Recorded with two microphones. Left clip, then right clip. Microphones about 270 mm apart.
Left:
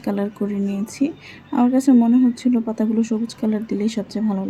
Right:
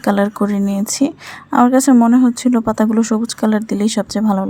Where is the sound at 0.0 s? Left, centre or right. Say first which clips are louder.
Right 9 dB; right.